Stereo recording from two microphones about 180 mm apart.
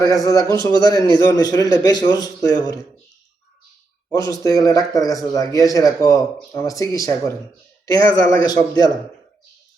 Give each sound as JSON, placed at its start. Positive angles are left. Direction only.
{"t": 0.0, "sound": "a man's voice", "side_deg": 20}
{"t": 4.1, "sound": "a man's voice", "side_deg": 20}